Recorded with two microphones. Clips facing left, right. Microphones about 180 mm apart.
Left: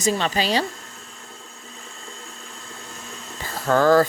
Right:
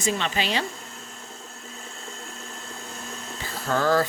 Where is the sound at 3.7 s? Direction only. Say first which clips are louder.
Left 6 dB; 50° left (ahead or behind).